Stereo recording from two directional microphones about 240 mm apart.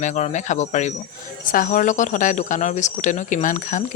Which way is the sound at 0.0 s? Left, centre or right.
Left.